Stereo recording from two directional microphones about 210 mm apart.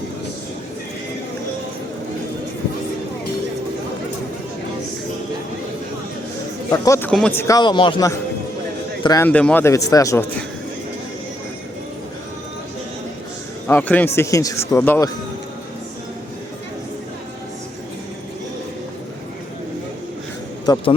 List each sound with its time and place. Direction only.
6.7 s a man's voice: 15° left (ahead or behind)
13.7 s a man's voice: 5° left (ahead or behind)
20.7 s speech: 20° left (ahead or behind)